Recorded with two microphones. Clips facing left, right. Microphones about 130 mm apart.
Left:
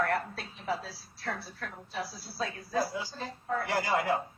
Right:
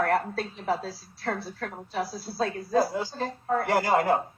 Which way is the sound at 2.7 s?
45° right (ahead or behind).